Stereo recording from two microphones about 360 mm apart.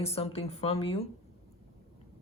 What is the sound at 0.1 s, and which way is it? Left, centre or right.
Speech, centre.